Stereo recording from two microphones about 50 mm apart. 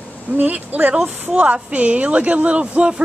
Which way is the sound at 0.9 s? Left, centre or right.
Right.